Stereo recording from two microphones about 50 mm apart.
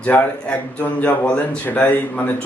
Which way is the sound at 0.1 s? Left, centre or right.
Left.